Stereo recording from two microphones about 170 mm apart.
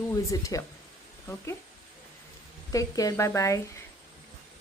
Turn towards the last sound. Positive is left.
turn(degrees=20)  # may be behind; listen again after turning